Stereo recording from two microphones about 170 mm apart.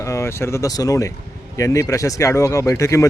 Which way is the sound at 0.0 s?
15° left (ahead or behind).